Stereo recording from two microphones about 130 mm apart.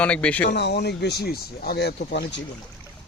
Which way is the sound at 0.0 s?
10° left (ahead or behind).